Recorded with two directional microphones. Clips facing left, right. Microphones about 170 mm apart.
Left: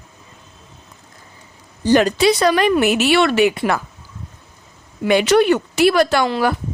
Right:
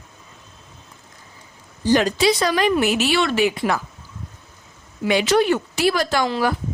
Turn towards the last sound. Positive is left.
turn(degrees=65)  # may be behind; listen again after turning